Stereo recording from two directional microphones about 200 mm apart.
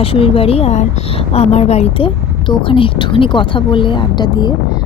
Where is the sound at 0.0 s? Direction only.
30° left (ahead or behind).